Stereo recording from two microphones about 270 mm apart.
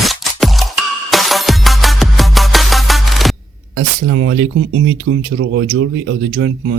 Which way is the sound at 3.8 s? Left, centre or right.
Right.